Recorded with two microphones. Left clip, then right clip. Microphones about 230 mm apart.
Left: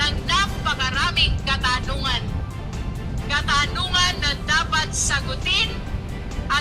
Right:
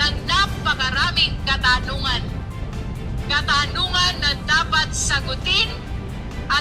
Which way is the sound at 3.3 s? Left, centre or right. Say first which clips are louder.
Right 1 dB; right.